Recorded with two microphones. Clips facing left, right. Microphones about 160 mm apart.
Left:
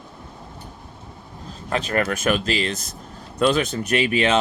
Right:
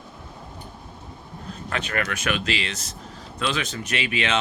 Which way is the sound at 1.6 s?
30° left (ahead or behind).